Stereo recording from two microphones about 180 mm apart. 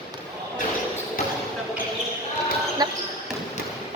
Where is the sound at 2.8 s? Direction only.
20° right (ahead or behind).